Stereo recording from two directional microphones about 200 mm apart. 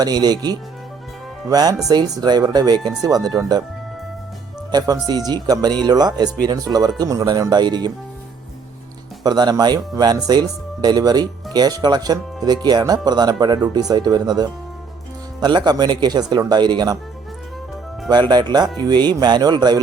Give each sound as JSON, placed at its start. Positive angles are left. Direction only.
{"t": 0.0, "sound": "speech", "side_deg": -20}
{"t": 4.7, "sound": "speech", "side_deg": -20}
{"t": 9.2, "sound": "speech", "side_deg": -20}
{"t": 18.1, "sound": "speech", "side_deg": -20}